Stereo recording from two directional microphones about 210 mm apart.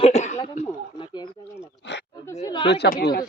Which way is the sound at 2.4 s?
20° left (ahead or behind).